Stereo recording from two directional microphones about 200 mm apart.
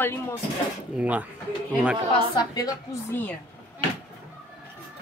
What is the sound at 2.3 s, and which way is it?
A woman's voice, 20° left (ahead or behind).